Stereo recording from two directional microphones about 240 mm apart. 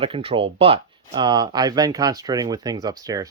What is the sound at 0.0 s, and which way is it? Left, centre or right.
Speech, right.